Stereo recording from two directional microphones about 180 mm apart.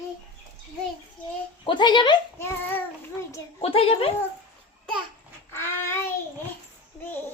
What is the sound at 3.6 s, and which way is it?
Speech, 30° left (ahead or behind).